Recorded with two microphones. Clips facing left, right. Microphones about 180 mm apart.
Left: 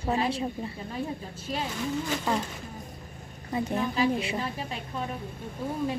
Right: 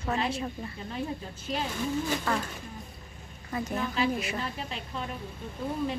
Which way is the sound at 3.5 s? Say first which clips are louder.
Left 3 dB; 30° left (ahead or behind).